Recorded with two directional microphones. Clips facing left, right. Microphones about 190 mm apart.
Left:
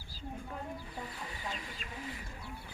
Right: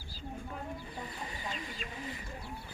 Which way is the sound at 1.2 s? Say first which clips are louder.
Right 1 dB; 5° left (ahead or behind).